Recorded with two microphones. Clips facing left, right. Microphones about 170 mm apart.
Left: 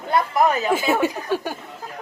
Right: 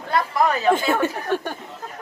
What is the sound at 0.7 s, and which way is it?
Speech, 10° left (ahead or behind).